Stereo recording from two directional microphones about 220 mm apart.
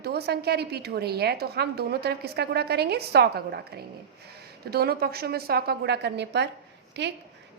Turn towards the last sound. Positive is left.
turn(degrees=-50)  # may be behind; listen again after turning